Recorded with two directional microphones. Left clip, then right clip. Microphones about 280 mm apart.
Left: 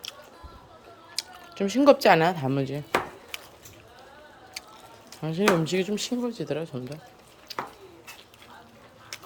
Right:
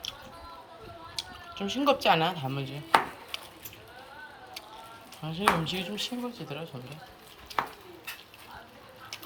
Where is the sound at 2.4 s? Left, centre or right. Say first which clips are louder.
Left 7 dB; left.